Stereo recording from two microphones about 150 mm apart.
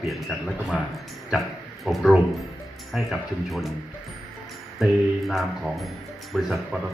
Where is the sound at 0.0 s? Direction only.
Centre (ahead or behind).